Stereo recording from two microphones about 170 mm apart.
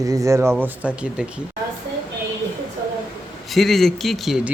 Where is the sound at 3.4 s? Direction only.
Centre (ahead or behind).